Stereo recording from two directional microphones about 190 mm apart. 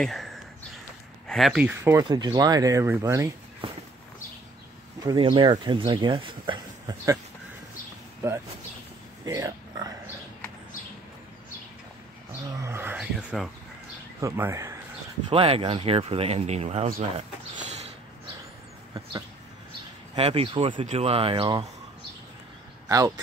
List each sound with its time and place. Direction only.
0.0 s speech: centre (ahead or behind); by 3.3 s 15° right (ahead or behind)
5.0 s speech: 25° right (ahead or behind)
9.2 s oink: 20° right (ahead or behind)
12.4 s a sound: 15° right (ahead or behind)
14.2 s speech: 15° right (ahead or behind)
15.2 s speech: 30° right (ahead or behind)
20.2 s speech: 30° right (ahead or behind)
22.8 s speech: 15° right (ahead or behind)